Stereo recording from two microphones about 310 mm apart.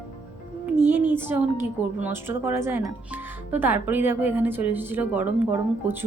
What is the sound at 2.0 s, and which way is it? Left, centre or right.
Speech, centre.